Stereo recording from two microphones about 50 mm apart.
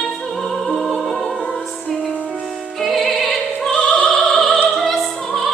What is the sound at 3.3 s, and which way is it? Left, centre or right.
Opera, centre.